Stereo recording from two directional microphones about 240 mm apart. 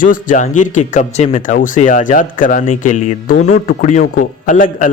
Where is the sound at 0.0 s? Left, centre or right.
Left.